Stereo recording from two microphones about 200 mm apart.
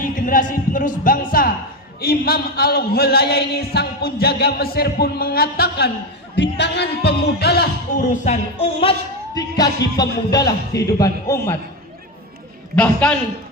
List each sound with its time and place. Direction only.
0.3 s music: 40° left (ahead or behind)
2.0 s a man's voice: 50° left (ahead or behind)
8.1 s music: 35° left (ahead or behind); by 11.5 s 15° left (ahead or behind)
12.7 s a man's voice: 5° left (ahead or behind)